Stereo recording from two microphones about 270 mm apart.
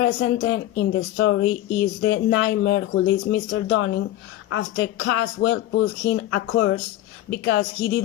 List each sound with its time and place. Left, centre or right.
0.0 s a woman's voice: left